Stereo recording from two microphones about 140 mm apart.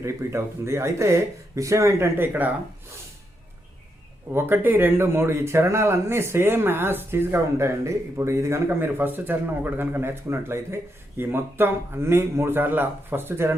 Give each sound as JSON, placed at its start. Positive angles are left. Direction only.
{"t": 0.0, "sound": "speech", "side_deg": -20}
{"t": 4.3, "sound": "speech", "side_deg": -15}